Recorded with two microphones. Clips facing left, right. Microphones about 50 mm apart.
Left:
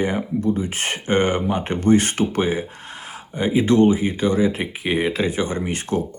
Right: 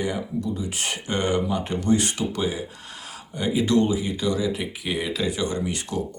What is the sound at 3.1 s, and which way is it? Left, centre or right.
Speech, left.